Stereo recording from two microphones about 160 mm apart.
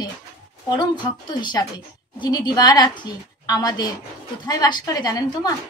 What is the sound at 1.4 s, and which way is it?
A woman's voice, 25° left (ahead or behind).